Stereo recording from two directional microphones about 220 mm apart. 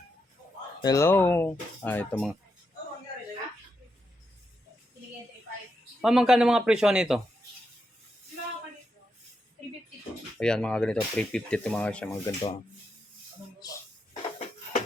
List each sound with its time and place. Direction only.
0.8 s speech: 15° left (ahead or behind)
6.0 s speech: centre (ahead or behind)
10.3 s speech: 5° left (ahead or behind)
13.6 s a sound: 15° left (ahead or behind)